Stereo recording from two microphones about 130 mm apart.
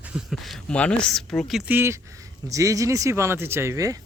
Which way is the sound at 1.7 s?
15° right (ahead or behind).